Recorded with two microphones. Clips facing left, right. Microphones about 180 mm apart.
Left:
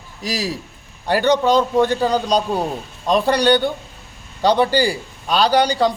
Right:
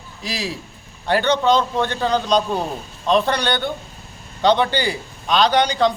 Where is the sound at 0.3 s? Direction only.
40° left (ahead or behind).